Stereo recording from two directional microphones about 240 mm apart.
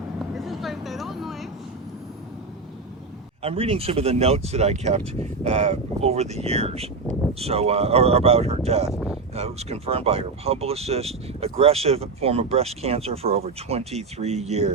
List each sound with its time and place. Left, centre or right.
0.3 s vehicle: centre
3.4 s speech: right
8.9 s speech: centre
9.3 s speech: right